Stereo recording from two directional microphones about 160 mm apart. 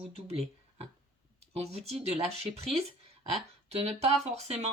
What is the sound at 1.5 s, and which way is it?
Speech, 40° right (ahead or behind).